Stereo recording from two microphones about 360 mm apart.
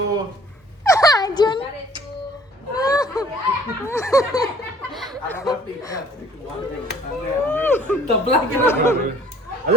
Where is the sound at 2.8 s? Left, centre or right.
Centre.